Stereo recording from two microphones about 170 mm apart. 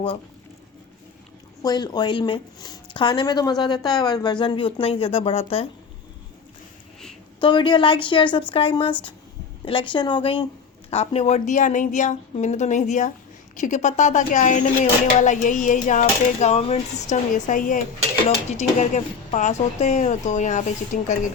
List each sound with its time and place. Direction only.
1.6 s speech: 25° left (ahead or behind)
7.4 s speech: 25° left (ahead or behind); by 21.2 s 45° left (ahead or behind)